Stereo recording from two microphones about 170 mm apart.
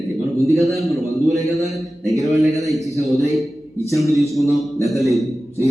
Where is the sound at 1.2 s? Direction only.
20° right (ahead or behind).